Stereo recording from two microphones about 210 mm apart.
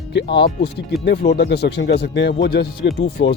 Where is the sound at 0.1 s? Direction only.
55° left (ahead or behind).